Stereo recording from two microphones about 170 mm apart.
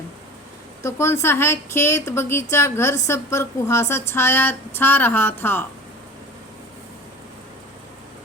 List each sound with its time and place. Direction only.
0.8 s speech: 15° left (ahead or behind)